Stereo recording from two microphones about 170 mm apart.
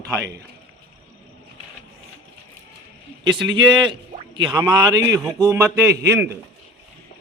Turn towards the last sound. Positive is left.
turn(degrees=-15)  # may be behind; listen again after turning